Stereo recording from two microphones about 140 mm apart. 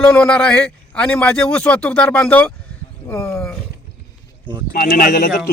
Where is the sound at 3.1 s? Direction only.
20° left (ahead or behind).